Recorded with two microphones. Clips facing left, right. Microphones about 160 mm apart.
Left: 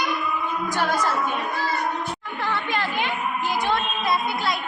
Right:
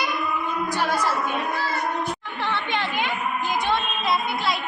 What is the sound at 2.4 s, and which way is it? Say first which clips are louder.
Chatter: even; 25° right (ahead or behind).